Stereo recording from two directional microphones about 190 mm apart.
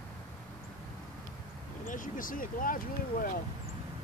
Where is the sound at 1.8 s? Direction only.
45° left (ahead or behind).